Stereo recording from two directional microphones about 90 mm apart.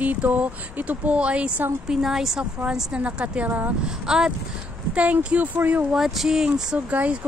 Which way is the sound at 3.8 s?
10° right (ahead or behind).